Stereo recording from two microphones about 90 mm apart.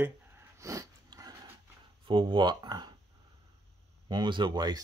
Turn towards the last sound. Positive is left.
turn(degrees=-50)  # may be behind; listen again after turning